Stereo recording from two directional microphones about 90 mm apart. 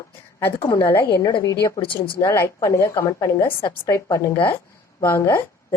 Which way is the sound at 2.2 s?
30° left (ahead or behind).